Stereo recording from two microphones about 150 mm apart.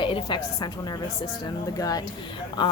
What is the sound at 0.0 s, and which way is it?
A woman's voice, 35° left (ahead or behind).